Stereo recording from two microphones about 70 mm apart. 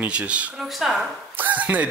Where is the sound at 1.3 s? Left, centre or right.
Right.